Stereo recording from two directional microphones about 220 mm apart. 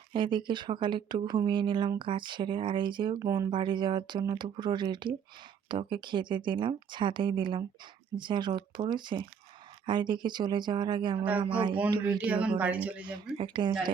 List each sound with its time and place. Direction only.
0.1 s speech: 20° right (ahead or behind)
11.2 s speech: 5° right (ahead or behind)
11.9 s speech: 20° right (ahead or behind)
12.2 s speech: 5° right (ahead or behind)
13.3 s speech: 20° right (ahead or behind)